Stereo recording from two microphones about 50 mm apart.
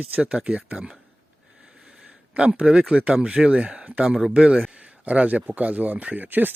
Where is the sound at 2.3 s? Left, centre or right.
Right.